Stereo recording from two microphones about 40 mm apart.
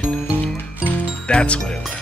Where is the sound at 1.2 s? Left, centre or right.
Left.